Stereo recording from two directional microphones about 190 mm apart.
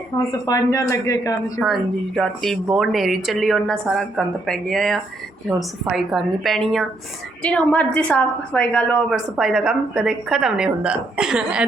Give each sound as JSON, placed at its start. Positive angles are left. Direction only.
{"t": 0.3, "sound": "speech", "side_deg": 20}
{"t": 1.5, "sound": "a woman's voice", "side_deg": 0}